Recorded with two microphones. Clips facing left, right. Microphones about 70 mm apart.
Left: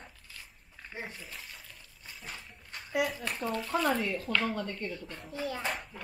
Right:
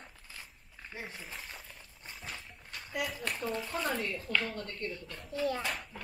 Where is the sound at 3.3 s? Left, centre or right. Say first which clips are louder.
Left 6 dB; centre.